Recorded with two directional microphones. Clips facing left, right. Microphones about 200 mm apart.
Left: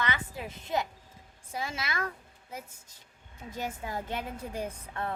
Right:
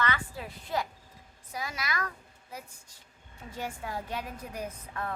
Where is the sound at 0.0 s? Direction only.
20° left (ahead or behind).